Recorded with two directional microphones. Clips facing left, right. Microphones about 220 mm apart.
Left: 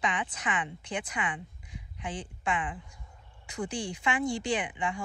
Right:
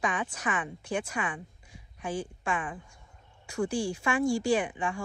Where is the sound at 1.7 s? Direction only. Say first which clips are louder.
Right 4 dB; 20° left (ahead or behind).